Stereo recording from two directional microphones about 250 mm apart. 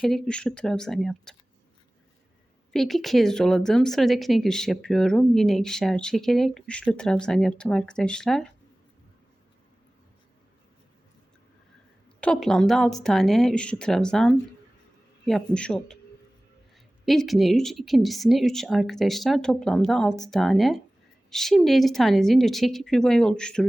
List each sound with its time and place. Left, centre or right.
0.0 s a woman's voice: centre
2.7 s a woman's voice: centre
12.2 s a woman's voice: centre
17.1 s a woman's voice: centre